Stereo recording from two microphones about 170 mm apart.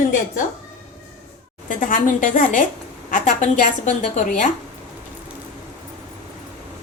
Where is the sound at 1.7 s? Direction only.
50° left (ahead or behind).